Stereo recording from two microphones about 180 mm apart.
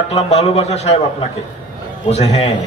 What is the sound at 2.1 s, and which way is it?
Speech, 35° left (ahead or behind).